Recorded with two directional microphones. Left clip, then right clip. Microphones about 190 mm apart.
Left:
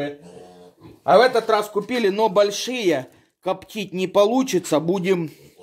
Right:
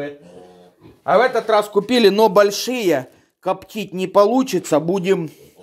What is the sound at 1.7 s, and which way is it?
Speech, 50° right (ahead or behind).